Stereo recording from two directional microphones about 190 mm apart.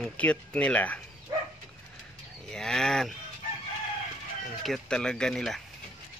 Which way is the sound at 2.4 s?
5° left (ahead or behind).